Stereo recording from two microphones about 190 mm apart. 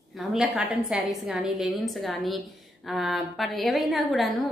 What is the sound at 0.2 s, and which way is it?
A woman's voice, 5° right (ahead or behind).